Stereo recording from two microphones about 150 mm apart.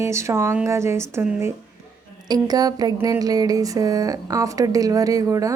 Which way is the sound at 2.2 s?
25° right (ahead or behind).